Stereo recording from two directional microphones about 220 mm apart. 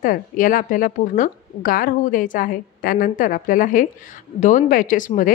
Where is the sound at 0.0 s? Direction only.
40° left (ahead or behind).